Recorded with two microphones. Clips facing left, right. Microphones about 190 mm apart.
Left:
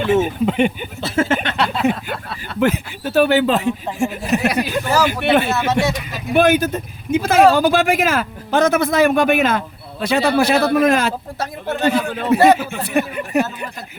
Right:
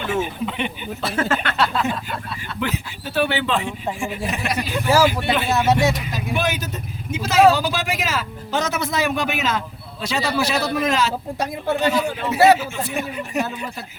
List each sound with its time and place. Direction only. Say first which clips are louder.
0.1 s a man's voice: left 7 dB; 45° left (ahead or behind)
1.0 s a sound: left 4 dB; 25° left (ahead or behind)
1.8 s a sound: left 6 dB; 60° left (ahead or behind)
2.6 s a man's voice: left 9 dB; 50° left (ahead or behind)
4.9 s speech: right 4 dB; 10° right (ahead or behind)
5.2 s speech: left 7 dB; 60° left (ahead or behind)
5.5 s speech: even; 15° right (ahead or behind)
6.3 s a man's voice: left 11 dB; 55° left (ahead or behind)